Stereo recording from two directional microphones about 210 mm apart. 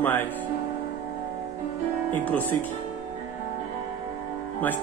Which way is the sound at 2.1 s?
10° left (ahead or behind).